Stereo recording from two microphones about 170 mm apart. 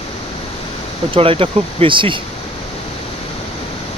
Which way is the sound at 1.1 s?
30° right (ahead or behind).